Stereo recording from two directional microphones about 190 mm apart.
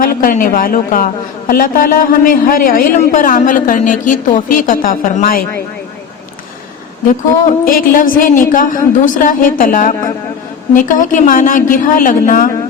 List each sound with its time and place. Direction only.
0.0 s a woman's voice: 45° left (ahead or behind)
7.4 s a woman's voice: 50° left (ahead or behind)